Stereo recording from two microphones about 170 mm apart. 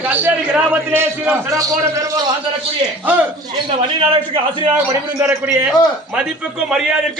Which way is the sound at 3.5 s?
30° right (ahead or behind).